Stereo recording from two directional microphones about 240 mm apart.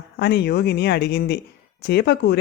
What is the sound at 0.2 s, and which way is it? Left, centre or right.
Speech, left.